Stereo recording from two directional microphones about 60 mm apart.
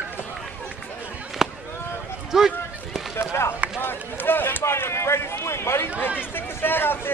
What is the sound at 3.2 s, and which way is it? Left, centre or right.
Run, left.